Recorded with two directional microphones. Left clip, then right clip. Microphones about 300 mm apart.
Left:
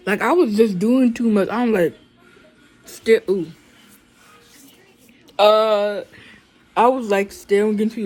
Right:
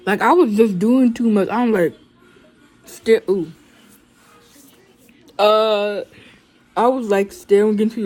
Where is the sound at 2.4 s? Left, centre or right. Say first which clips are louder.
Even; centre.